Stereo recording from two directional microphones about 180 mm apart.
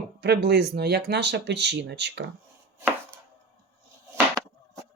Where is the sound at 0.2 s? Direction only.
70° right (ahead or behind).